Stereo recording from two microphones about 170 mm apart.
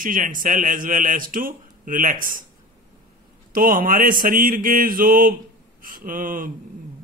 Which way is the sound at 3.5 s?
55° right (ahead or behind).